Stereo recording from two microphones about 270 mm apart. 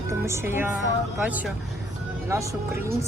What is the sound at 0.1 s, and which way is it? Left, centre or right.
A woman's voice, centre.